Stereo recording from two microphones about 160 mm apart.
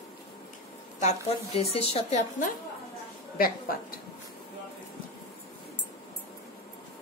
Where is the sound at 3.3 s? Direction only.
65° left (ahead or behind).